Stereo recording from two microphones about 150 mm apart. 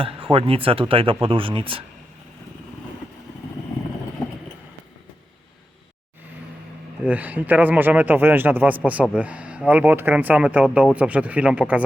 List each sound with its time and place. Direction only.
0.0 s speech: 35° right (ahead or behind)
7.0 s speech: 10° right (ahead or behind)